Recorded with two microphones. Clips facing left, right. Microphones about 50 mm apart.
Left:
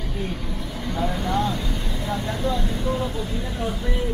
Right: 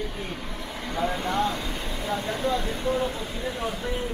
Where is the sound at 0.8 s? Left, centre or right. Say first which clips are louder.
Left 1 dB; right.